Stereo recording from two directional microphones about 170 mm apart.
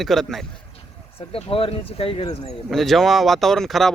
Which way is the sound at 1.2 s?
35° left (ahead or behind).